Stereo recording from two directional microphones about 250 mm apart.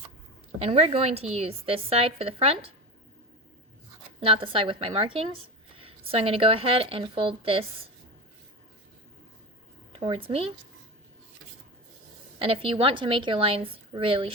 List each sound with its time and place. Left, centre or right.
0.6 s speech: right
4.2 s speech: right
9.9 s speech: right
12.4 s speech: right